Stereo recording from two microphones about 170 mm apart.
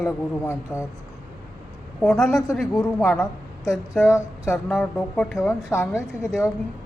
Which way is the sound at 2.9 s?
10° left (ahead or behind).